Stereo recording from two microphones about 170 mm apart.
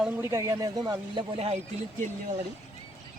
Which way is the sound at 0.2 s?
20° right (ahead or behind).